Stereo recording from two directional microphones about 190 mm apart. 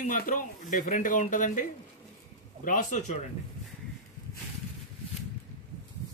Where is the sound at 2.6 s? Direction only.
45° left (ahead or behind).